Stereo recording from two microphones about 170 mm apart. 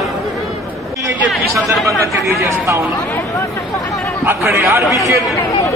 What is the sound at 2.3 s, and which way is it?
Speech, 15° right (ahead or behind).